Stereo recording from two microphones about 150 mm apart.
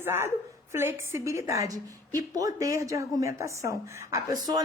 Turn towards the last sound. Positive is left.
turn(degrees=-20)  # may be behind; listen again after turning